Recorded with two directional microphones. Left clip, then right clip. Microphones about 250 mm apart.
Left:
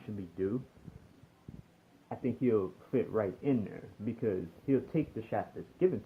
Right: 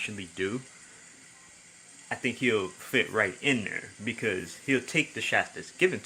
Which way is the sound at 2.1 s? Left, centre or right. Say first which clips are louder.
Right 4 dB; centre.